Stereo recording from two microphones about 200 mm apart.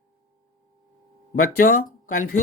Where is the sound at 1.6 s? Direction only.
45° left (ahead or behind).